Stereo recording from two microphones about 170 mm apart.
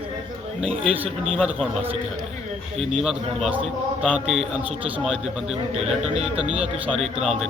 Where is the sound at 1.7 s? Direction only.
35° right (ahead or behind).